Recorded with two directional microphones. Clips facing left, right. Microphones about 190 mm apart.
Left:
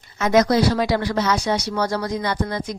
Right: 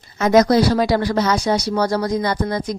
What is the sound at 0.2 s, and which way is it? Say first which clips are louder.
Speech: right 3 dB; 35° right (ahead or behind).